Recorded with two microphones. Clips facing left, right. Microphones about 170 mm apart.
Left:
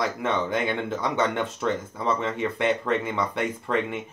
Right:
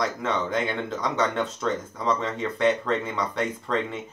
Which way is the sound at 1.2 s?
15° left (ahead or behind).